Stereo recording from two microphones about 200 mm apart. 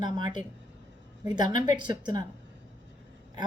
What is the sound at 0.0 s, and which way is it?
A woman's voice, 20° right (ahead or behind).